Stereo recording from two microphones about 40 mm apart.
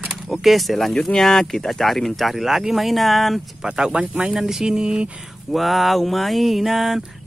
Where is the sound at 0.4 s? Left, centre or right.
Centre.